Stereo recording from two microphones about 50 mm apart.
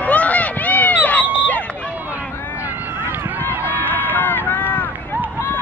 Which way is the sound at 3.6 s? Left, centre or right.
Right.